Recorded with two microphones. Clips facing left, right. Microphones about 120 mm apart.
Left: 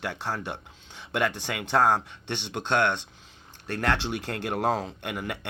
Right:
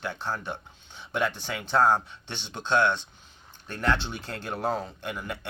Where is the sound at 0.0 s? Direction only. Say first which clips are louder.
Left 1 dB; 65° left (ahead or behind).